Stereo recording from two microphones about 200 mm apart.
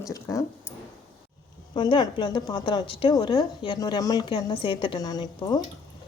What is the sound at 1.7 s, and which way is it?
A woman's voice, 20° left (ahead or behind).